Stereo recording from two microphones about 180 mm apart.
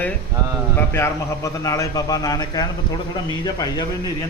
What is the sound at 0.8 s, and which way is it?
A man's voice, 15° left (ahead or behind).